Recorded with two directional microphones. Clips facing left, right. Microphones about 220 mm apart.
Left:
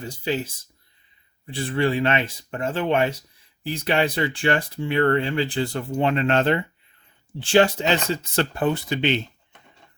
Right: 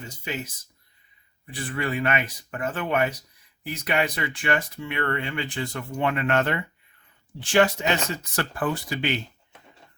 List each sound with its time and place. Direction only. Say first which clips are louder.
0.0 s speech: left 7 dB; 35° left (ahead or behind)